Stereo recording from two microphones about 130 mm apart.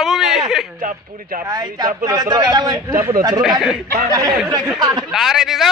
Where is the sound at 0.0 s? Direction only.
5° right (ahead or behind).